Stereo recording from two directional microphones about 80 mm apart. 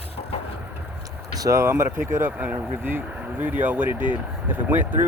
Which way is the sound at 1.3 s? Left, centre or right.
Right.